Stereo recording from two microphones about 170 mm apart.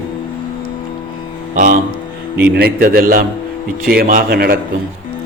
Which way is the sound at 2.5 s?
65° right (ahead or behind).